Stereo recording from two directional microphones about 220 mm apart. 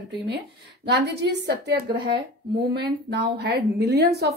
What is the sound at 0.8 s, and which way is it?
A woman's voice, 50° right (ahead or behind).